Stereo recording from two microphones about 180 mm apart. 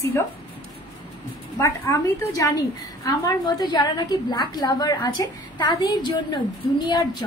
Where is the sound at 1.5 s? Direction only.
15° left (ahead or behind).